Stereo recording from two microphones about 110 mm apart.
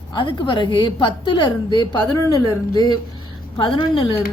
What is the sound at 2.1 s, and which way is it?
Speech, 30° left (ahead or behind).